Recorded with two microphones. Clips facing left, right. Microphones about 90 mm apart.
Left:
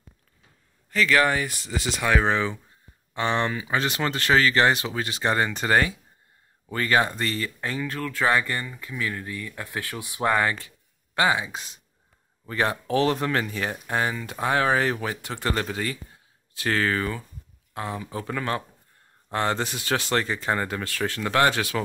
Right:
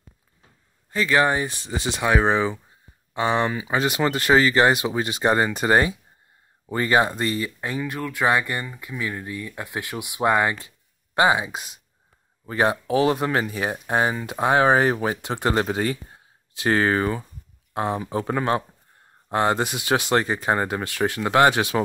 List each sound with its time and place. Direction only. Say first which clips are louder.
0.8 s speech: right 1 dB; 20° right (ahead or behind)